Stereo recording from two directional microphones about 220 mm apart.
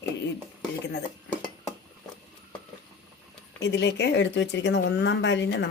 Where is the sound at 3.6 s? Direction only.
50° left (ahead or behind).